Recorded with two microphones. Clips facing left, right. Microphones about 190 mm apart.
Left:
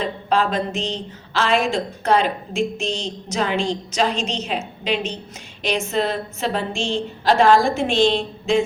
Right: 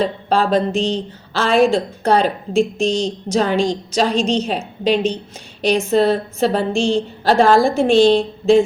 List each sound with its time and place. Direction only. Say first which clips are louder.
0.0 s speech: right 3 dB; 35° right (ahead or behind)